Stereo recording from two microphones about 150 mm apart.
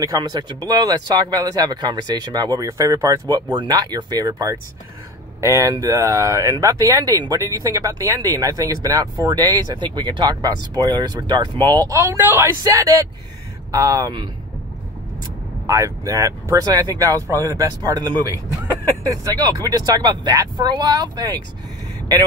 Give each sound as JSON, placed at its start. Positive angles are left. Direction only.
{"t": 0.0, "sound": "speech", "side_deg": -25}
{"t": 15.6, "sound": "speech", "side_deg": -20}